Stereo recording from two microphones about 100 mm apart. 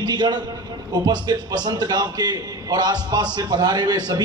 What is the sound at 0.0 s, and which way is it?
A man's voice, 45° right (ahead or behind).